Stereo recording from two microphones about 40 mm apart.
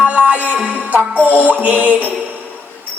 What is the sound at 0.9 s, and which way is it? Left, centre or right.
Music, right.